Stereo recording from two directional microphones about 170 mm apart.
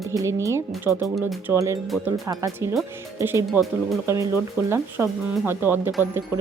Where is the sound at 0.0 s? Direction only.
20° right (ahead or behind).